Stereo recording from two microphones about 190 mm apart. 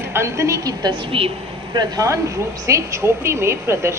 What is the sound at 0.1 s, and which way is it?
A woman's voice, 15° right (ahead or behind).